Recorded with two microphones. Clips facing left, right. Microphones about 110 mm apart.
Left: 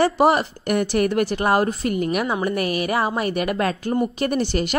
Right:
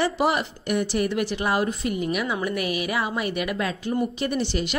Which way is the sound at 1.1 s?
45° left (ahead or behind).